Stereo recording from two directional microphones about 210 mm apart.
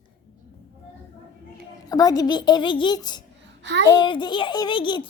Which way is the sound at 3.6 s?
55° right (ahead or behind).